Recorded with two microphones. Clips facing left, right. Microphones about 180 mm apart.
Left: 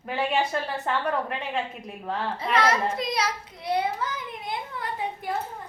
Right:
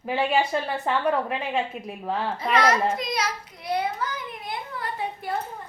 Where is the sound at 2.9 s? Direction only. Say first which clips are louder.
Even; 30° left (ahead or behind).